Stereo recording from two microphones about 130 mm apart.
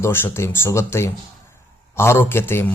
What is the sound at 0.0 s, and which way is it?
A man's voice, 20° left (ahead or behind).